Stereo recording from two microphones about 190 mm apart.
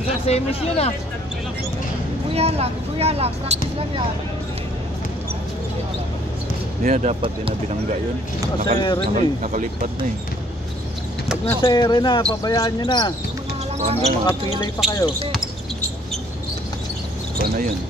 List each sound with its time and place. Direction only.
0.3 s speech: 30° left (ahead or behind)
2.3 s speech: 30° right (ahead or behind)
6.8 s speech: 40° right (ahead or behind)
8.7 s speech: 25° left (ahead or behind)
9.1 s speech: 40° right (ahead or behind)
11.6 s speech: 20° left (ahead or behind)
13.7 s speech: 35° right (ahead or behind)
14.9 s speech: 20° left (ahead or behind)